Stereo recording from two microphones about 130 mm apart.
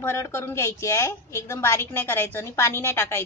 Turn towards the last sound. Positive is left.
turn(degrees=20)  # may be behind; listen again after turning